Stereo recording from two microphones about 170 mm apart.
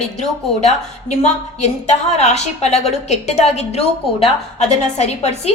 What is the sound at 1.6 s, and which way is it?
A woman's voice, 40° left (ahead or behind).